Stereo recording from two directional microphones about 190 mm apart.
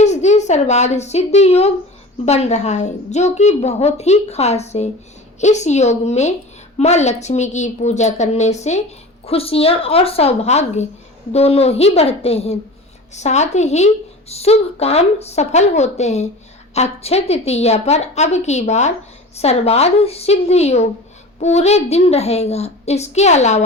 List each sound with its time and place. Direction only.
0.0 s a woman's voice: 35° left (ahead or behind)